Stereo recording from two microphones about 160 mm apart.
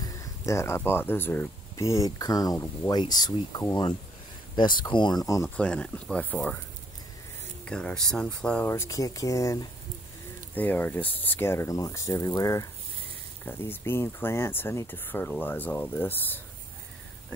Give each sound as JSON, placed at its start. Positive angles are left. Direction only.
{"t": 0.0, "sound": "speech", "side_deg": 20}
{"t": 5.6, "sound": "speech", "side_deg": 5}
{"t": 7.6, "sound": "speech", "side_deg": 5}